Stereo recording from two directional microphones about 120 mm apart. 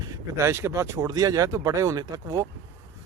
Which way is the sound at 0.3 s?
25° right (ahead or behind).